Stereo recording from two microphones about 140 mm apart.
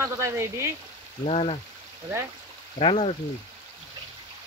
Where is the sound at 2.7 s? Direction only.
45° left (ahead or behind).